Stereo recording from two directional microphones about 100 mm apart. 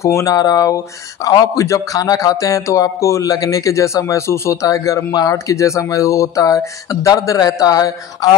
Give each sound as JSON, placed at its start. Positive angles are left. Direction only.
{"t": 0.0, "sound": "speech", "side_deg": 30}